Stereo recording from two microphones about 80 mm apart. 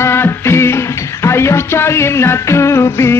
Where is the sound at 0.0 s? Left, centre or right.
Left.